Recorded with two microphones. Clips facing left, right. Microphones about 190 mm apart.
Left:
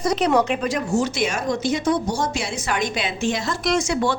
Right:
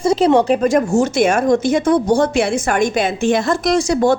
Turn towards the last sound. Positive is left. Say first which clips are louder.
# right 7 dB
turn(degrees=-40)  # may be behind; listen again after turning